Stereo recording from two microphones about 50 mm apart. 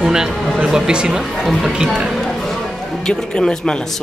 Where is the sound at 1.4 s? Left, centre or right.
Centre.